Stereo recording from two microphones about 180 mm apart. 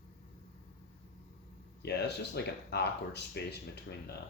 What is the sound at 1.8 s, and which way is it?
Speech, 65° left (ahead or behind).